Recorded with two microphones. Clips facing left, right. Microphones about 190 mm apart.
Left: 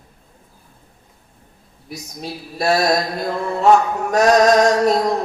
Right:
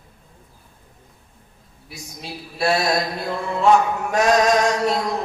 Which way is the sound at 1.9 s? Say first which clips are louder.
Left 5 dB; 40° left (ahead or behind).